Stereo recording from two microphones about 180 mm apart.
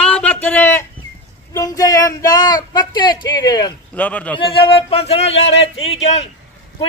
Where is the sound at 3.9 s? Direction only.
10° left (ahead or behind).